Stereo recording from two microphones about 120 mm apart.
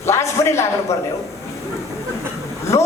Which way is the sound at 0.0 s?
25° left (ahead or behind).